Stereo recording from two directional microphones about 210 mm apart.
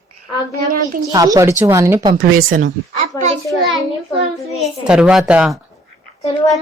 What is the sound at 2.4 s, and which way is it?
Speech, 40° right (ahead or behind).